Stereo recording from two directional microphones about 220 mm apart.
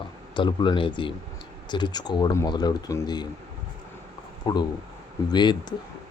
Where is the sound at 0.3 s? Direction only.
20° left (ahead or behind).